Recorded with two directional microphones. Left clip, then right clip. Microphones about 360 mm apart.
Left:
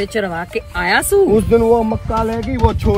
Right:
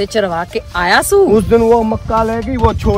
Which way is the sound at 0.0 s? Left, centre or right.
Centre.